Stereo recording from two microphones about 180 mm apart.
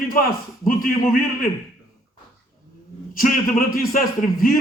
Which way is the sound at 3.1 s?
55° left (ahead or behind).